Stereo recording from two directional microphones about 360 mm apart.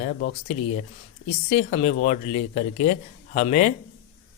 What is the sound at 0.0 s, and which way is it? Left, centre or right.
Speech, left.